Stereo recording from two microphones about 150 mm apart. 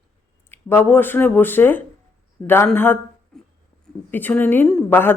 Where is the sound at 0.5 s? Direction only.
15° left (ahead or behind).